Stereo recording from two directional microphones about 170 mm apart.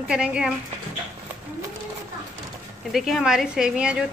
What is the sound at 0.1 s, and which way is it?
Speech, 5° right (ahead or behind).